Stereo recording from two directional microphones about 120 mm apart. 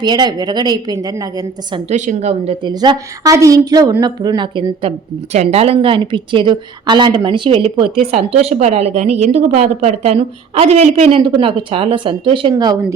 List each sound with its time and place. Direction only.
0.0 s a woman's voice: 35° right (ahead or behind)
1.9 s a woman's voice: 75° right (ahead or behind); by 2.6 s 60° right (ahead or behind)
2.6 s a woman's voice: 40° right (ahead or behind)